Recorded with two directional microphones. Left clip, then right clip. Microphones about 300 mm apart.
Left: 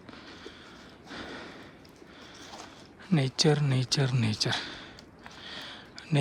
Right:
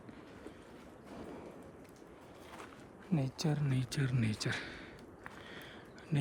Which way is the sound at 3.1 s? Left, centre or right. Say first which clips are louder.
Left 12 dB; left.